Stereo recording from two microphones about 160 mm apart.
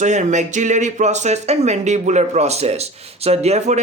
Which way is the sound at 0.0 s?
50° right (ahead or behind).